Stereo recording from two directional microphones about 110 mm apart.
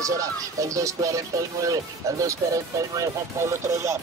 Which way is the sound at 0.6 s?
30° right (ahead or behind).